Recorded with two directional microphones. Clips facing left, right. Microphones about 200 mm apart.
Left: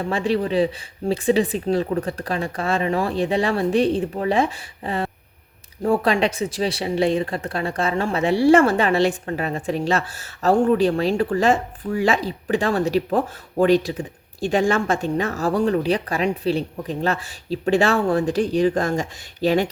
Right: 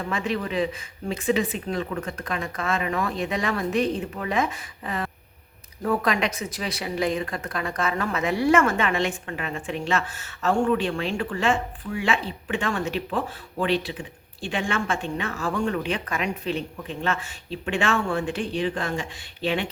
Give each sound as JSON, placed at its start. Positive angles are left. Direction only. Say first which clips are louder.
{"t": 0.0, "sound": "speech", "louder": "left 6 dB", "side_deg": 30}